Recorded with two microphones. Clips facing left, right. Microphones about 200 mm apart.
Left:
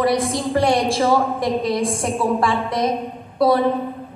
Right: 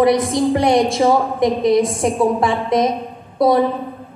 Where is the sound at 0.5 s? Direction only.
15° right (ahead or behind).